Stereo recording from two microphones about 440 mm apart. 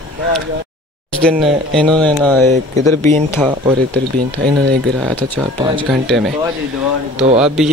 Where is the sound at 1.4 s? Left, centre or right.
Centre.